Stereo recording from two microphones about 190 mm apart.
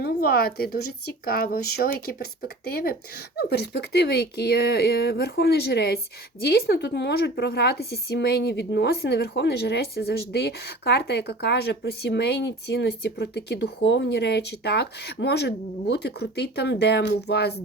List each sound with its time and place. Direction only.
0.0 s a woman's voice: 55° left (ahead or behind)